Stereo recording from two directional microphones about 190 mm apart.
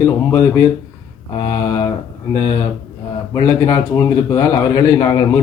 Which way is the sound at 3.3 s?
20° left (ahead or behind).